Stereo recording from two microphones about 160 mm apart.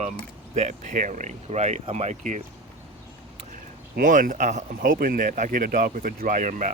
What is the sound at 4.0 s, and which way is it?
Speech, 55° right (ahead or behind).